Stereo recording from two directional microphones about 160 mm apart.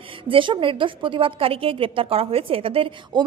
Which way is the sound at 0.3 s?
30° right (ahead or behind).